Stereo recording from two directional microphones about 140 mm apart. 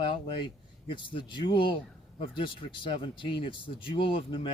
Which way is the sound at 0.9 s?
35° left (ahead or behind).